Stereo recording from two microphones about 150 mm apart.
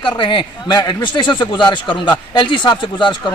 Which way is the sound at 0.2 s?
30° left (ahead or behind).